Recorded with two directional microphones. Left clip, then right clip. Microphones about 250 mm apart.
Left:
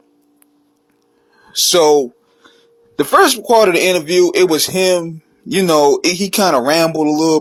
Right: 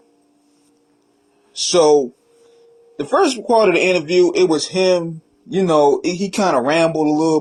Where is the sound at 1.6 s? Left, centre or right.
Left.